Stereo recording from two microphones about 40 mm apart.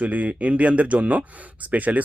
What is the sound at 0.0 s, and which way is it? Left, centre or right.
Speech, right.